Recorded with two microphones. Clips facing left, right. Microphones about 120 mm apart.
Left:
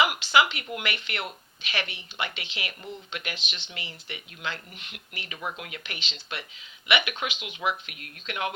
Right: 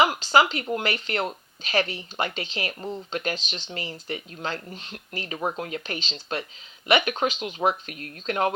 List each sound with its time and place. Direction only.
0.0 s speech: 40° right (ahead or behind)